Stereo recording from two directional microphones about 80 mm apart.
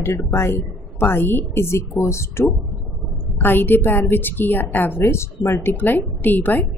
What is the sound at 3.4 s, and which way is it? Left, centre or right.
A woman's voice, left.